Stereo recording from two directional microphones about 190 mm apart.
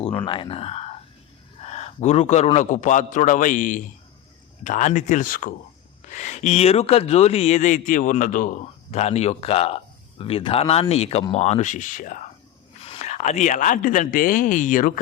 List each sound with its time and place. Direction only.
0.0 s a sound: 10° left (ahead or behind)
0.3 s speech: 25° left (ahead or behind); by 12.2 s 40° left (ahead or behind)
12.8 s speech: 30° left (ahead or behind)